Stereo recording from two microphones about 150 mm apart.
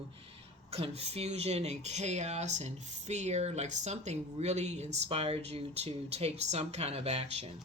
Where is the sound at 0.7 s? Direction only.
45° right (ahead or behind).